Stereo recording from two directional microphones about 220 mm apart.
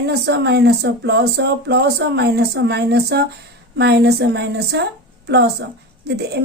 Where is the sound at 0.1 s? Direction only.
50° right (ahead or behind).